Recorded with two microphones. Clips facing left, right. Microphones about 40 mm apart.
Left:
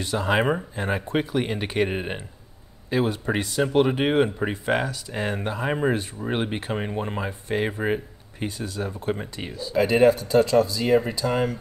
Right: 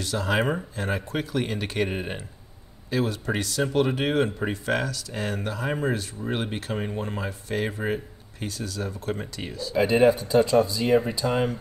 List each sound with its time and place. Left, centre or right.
0.0 s speech: centre
10.5 s speech: centre
11.2 s speech: right